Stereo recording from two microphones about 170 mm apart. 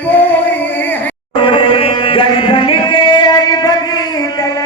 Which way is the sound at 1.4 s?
30° left (ahead or behind).